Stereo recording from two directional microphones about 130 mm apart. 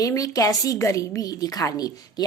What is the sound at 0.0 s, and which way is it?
A woman's voice, 25° left (ahead or behind).